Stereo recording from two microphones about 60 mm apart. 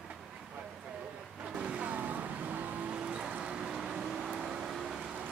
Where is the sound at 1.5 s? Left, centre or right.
Centre.